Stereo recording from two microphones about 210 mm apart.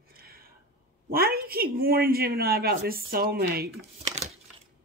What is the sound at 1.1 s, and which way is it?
A woman's voice, 45° right (ahead or behind).